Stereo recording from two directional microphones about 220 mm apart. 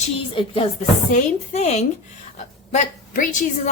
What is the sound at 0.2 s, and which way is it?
A woman's voice, 25° left (ahead or behind).